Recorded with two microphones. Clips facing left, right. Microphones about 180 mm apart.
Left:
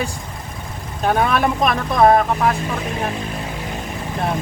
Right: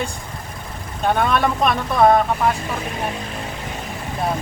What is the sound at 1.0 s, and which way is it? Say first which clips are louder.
Speech: left 1 dB; 5° left (ahead or behind).